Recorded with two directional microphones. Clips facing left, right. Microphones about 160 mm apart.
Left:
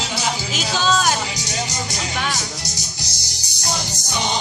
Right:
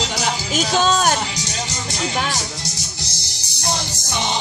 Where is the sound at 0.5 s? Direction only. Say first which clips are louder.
Right 3 dB; 45° right (ahead or behind).